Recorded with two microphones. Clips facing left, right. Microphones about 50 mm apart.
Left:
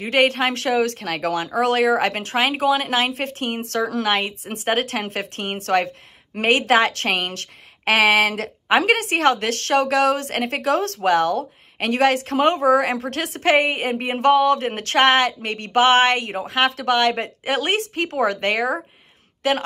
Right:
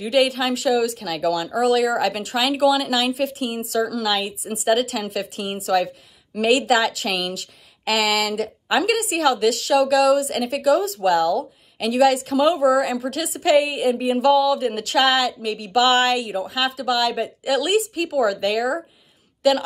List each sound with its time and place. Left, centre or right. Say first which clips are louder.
0.0 s a woman's voice: left 1 dB; left